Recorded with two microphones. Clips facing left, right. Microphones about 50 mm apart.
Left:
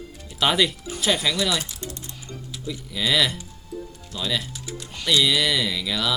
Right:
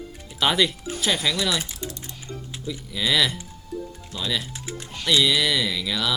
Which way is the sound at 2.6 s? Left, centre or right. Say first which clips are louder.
Even; centre.